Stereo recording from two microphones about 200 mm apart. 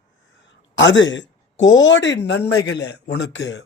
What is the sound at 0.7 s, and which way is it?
Speech, 70° left (ahead or behind).